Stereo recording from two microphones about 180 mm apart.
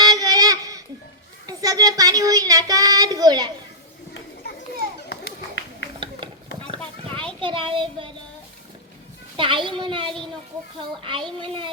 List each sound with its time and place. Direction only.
0.0 s child singing: 20° right (ahead or behind)
6.2 s clip-clop: 25° right (ahead or behind)
7.4 s a child's voice: 30° right (ahead or behind)
9.4 s a child's voice: 25° right (ahead or behind)